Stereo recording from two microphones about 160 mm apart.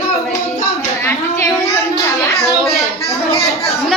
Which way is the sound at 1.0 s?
15° left (ahead or behind).